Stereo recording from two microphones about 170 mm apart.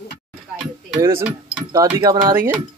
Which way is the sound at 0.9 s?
15° right (ahead or behind).